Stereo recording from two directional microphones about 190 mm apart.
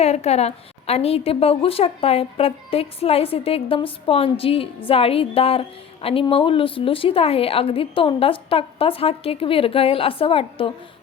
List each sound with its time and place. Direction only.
0.0 s a woman's voice: 35° left (ahead or behind)